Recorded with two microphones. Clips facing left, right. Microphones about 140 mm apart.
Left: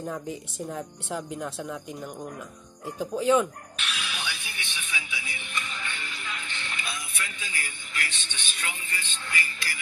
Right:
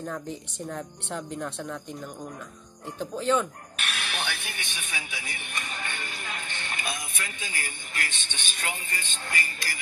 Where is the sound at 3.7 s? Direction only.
55° right (ahead or behind).